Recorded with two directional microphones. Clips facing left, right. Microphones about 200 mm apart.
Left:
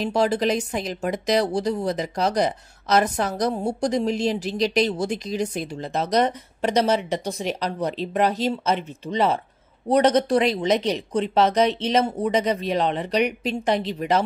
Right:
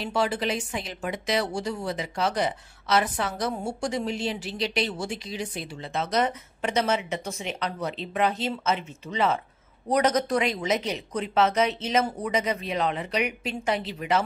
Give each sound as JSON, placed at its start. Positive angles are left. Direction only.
{"t": 0.0, "sound": "a woman's voice", "side_deg": 40}